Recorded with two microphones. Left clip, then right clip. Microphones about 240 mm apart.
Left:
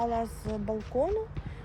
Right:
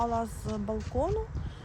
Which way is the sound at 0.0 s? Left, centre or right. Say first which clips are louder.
Even; right.